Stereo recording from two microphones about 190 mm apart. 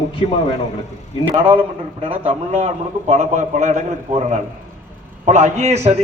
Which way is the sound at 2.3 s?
35° right (ahead or behind).